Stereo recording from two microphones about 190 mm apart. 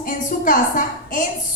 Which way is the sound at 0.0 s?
45° left (ahead or behind).